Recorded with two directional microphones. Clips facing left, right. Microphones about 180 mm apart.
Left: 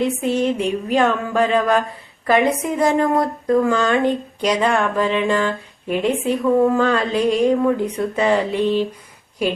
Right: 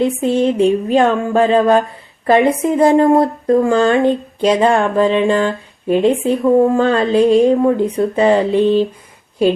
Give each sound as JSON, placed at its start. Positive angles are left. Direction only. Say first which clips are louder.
{"t": 0.0, "sound": "speech", "louder": "right 4 dB", "side_deg": -30}